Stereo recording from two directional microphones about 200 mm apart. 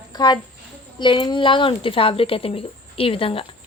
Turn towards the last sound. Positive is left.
turn(degrees=25)  # may be behind; listen again after turning